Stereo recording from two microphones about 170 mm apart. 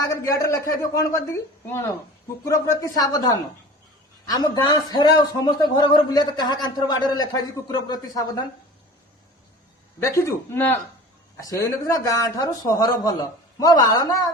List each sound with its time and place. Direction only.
0.0 s a man's voice: 20° left (ahead or behind)
10.0 s a man's voice: 15° left (ahead or behind)